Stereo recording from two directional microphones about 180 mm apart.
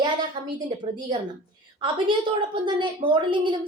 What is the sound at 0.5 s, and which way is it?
Speech, 25° right (ahead or behind).